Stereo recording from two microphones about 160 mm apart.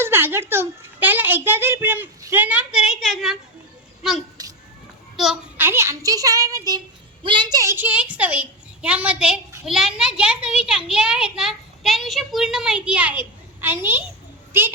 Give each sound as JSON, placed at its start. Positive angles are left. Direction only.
{"t": 0.0, "sound": "a woman's voice", "side_deg": -15}
{"t": 5.1, "sound": "a child's voice", "side_deg": 0}
{"t": 5.5, "sound": "a child's voice", "side_deg": -15}